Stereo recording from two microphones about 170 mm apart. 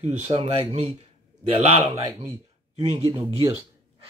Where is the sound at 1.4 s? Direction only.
40° right (ahead or behind).